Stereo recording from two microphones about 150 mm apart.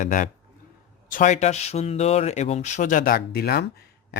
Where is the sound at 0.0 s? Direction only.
60° left (ahead or behind).